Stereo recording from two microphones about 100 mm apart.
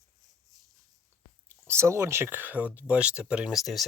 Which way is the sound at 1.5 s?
25° right (ahead or behind).